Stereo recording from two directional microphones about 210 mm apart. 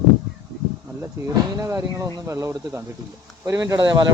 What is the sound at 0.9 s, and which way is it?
Speech, 10° right (ahead or behind).